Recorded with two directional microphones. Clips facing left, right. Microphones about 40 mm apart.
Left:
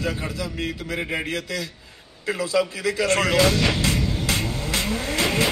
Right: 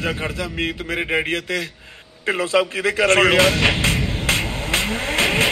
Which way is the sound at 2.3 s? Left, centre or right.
Right.